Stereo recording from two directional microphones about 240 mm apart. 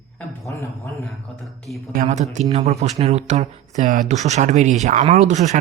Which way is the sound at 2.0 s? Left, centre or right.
Right.